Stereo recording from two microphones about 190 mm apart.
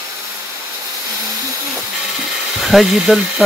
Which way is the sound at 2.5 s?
Centre (ahead or behind).